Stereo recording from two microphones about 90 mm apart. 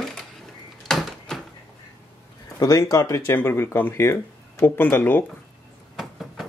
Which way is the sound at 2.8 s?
35° left (ahead or behind).